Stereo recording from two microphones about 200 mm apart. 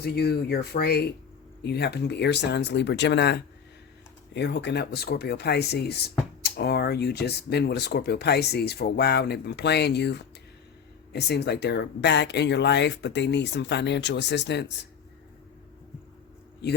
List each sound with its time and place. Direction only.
0.0 s speech: 55° left (ahead or behind)